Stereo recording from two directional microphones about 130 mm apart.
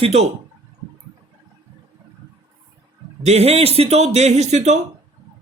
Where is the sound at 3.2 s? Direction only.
55° right (ahead or behind).